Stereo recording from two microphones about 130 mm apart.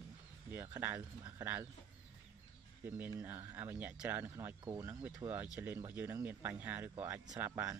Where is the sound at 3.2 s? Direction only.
20° right (ahead or behind).